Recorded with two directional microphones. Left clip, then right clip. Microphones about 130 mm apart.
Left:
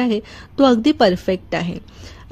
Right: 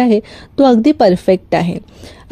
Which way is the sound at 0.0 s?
25° right (ahead or behind).